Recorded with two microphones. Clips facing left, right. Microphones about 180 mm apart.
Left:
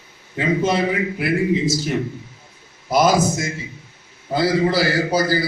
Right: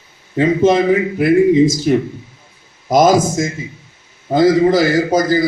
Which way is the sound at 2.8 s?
45° right (ahead or behind).